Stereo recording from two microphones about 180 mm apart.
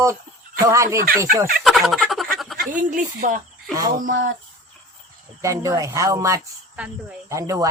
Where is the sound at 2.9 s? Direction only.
50° right (ahead or behind).